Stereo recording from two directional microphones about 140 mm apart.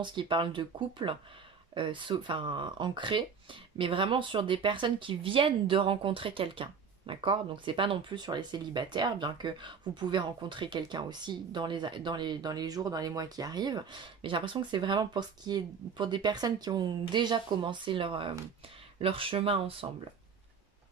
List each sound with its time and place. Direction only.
0.0 s speech: 35° right (ahead or behind)